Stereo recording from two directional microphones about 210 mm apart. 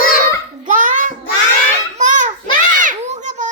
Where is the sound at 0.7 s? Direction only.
35° right (ahead or behind).